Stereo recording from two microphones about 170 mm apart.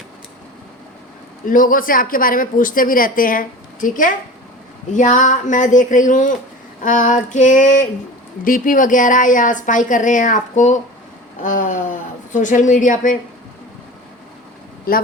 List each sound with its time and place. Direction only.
1.5 s a woman's voice: 55° left (ahead or behind)